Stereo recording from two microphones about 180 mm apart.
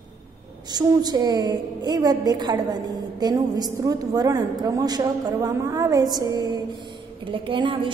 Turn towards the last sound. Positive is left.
turn(degrees=-25)  # may be behind; listen again after turning